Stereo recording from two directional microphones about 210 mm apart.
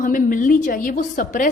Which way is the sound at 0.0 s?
40° left (ahead or behind).